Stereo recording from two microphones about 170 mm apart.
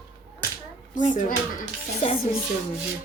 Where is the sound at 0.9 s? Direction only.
50° left (ahead or behind).